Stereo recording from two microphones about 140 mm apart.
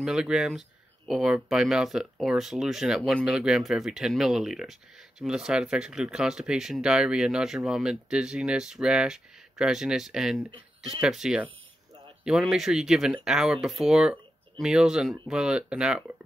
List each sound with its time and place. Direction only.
0.0 s speech: 5° right (ahead or behind)